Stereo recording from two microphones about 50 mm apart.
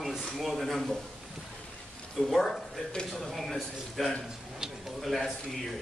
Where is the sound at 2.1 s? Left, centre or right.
Centre.